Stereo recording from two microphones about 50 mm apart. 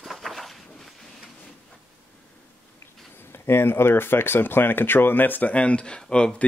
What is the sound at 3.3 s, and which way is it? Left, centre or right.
Speech, left.